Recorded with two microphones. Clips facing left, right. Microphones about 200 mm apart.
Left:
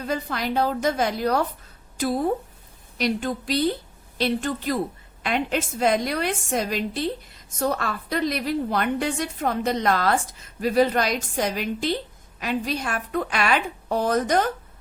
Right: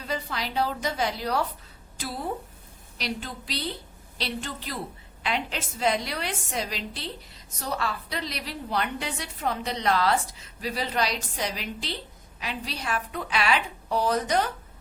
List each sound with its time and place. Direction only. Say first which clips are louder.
0.0 s a woman's voice: left 5 dB; 50° left (ahead or behind)